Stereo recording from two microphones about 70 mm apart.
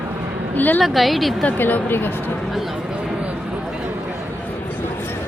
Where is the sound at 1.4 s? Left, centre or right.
Left.